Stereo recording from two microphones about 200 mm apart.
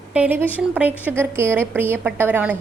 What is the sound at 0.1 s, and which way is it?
A woman's voice, 5° right (ahead or behind).